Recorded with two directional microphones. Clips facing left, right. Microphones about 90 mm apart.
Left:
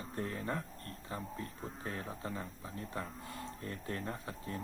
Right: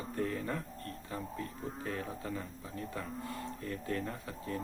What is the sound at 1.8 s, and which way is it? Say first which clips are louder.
Speech: right 2 dB; 30° left (ahead or behind).